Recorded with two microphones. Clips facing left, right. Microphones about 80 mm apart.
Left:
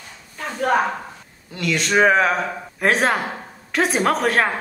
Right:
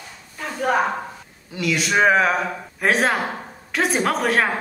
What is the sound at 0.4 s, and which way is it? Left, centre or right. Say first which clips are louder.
Speech: left 1 dB; centre.